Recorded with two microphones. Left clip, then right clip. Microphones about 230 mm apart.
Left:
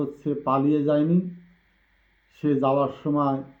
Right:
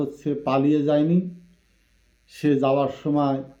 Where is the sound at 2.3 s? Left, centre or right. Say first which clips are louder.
Right 2 dB; right.